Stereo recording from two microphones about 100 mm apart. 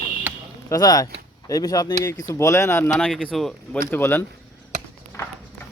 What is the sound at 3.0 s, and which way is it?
Speech, centre (ahead or behind).